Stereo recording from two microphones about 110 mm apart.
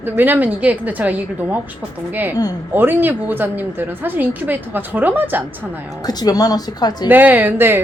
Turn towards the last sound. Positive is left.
turn(degrees=-20)  # may be behind; listen again after turning